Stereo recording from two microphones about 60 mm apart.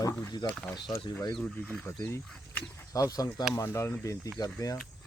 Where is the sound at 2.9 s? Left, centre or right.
Left.